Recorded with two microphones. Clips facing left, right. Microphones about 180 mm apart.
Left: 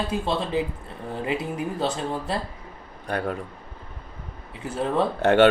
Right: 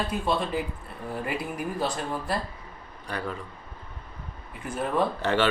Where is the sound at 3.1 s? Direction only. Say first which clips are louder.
Left 6 dB; 60° left (ahead or behind).